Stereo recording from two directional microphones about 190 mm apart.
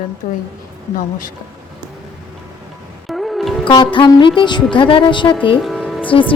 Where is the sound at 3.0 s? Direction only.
Centre (ahead or behind).